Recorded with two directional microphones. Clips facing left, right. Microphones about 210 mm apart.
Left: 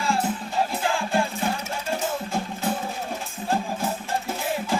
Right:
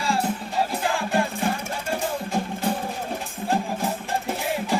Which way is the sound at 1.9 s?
15° right (ahead or behind).